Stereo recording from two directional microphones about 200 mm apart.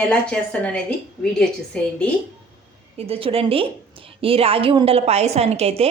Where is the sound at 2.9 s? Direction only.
30° right (ahead or behind).